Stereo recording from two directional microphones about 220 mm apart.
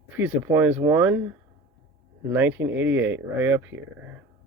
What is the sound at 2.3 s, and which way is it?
Speech, 10° right (ahead or behind).